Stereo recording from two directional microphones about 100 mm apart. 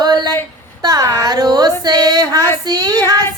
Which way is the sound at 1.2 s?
40° right (ahead or behind).